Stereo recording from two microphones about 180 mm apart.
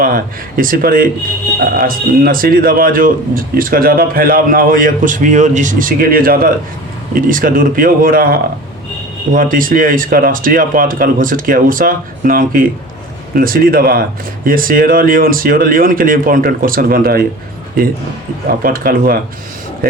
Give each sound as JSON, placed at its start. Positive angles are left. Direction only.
{"t": 0.0, "sound": "speech", "side_deg": -50}
{"t": 18.6, "sound": "speech", "side_deg": -55}